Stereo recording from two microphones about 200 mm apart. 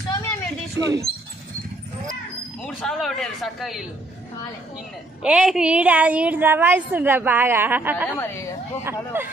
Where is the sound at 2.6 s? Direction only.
5° left (ahead or behind).